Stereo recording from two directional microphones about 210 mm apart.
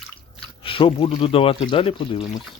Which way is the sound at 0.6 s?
25° left (ahead or behind).